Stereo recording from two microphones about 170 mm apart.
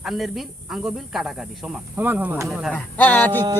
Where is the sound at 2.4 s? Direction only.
Centre (ahead or behind).